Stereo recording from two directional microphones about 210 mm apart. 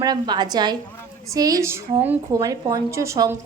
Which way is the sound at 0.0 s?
20° right (ahead or behind).